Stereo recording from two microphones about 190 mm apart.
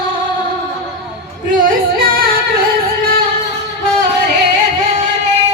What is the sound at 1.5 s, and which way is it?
Music, 45° right (ahead or behind).